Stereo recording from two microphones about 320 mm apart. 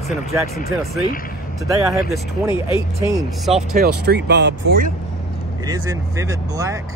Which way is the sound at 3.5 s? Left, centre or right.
Centre.